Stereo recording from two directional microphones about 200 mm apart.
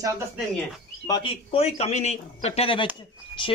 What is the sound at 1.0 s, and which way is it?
Speech, 20° left (ahead or behind).